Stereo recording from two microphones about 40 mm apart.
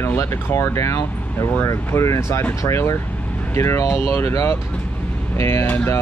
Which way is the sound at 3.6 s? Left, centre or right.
Left.